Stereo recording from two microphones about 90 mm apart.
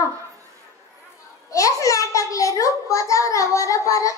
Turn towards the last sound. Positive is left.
turn(degrees=35)  # may be behind; listen again after turning